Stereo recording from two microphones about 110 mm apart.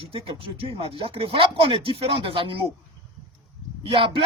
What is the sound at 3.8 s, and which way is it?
Speech, 50° right (ahead or behind).